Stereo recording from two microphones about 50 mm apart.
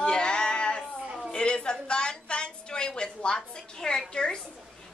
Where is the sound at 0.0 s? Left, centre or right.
Centre.